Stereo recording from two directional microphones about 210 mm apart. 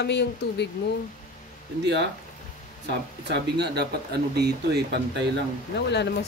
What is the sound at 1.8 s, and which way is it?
Speech, 55° right (ahead or behind).